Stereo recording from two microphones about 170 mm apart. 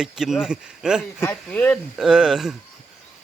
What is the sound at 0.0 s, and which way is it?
Speech, 5° right (ahead or behind).